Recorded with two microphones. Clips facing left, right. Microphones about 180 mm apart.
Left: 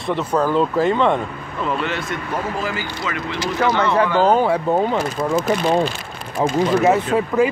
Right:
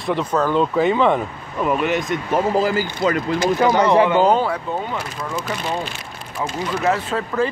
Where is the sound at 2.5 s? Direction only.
35° right (ahead or behind).